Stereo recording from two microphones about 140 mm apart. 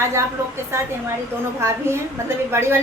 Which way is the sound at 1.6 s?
20° right (ahead or behind).